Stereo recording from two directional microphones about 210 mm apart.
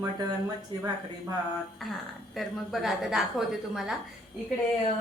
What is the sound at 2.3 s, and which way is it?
A woman's voice, centre (ahead or behind).